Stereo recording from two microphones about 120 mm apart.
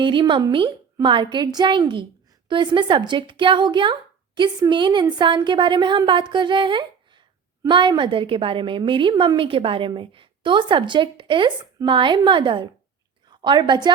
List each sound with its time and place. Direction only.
0.0 s a woman's voice: 45° right (ahead or behind)